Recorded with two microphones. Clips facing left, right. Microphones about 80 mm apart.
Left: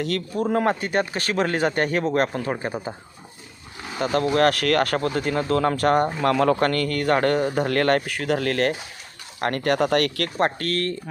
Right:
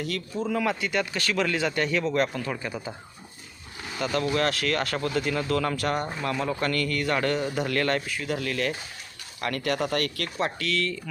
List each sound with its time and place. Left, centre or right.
0.0 s speech: left
3.9 s speech: left
4.4 s speech: left
4.9 s speech: left
6.2 s speech: left